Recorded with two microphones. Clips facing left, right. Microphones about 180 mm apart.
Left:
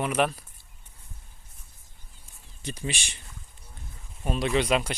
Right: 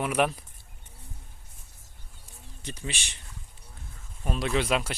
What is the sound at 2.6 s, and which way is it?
Speech, 15° left (ahead or behind).